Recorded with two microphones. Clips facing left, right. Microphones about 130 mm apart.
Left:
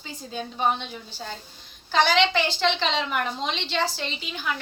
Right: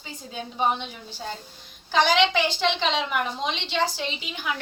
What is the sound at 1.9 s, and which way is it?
A woman's voice, 15° right (ahead or behind).